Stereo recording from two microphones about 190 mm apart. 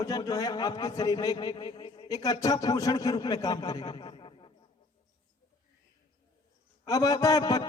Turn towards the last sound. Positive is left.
turn(degrees=20)  # may be behind; listen again after turning